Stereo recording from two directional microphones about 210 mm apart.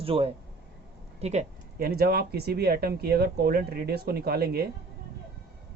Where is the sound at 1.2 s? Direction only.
35° right (ahead or behind).